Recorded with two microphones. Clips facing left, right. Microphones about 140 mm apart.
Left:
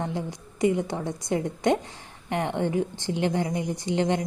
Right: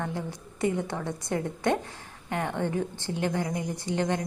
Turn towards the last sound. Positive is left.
turn(degrees=20)  # may be behind; listen again after turning